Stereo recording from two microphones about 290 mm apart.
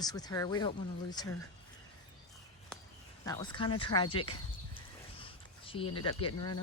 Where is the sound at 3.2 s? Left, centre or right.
Centre.